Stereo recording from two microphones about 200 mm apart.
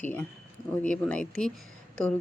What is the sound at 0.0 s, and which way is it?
A woman's voice, 10° left (ahead or behind).